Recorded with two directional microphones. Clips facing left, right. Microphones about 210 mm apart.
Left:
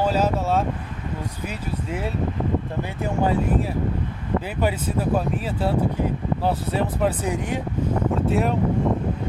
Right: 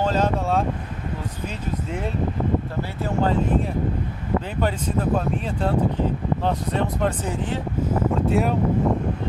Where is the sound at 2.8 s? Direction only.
15° left (ahead or behind).